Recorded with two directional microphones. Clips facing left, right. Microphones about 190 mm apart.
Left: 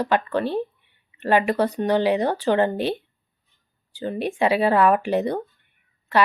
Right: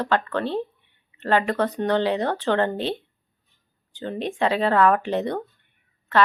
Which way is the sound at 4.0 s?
10° left (ahead or behind).